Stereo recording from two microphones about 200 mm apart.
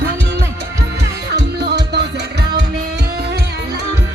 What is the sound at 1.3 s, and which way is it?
Music, 55° right (ahead or behind).